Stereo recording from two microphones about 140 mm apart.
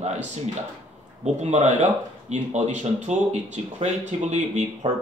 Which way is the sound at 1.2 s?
55° right (ahead or behind).